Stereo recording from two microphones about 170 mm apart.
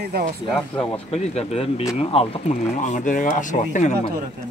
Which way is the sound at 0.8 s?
35° left (ahead or behind).